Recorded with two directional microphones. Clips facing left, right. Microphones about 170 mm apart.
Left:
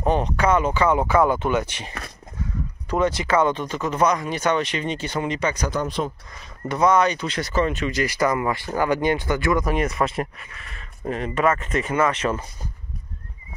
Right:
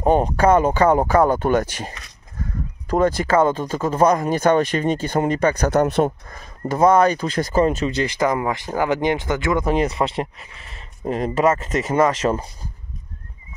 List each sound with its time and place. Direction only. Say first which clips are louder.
0.0 s speech: right 5 dB; 40° right (ahead or behind)
8.0 s speech: even; 20° right (ahead or behind)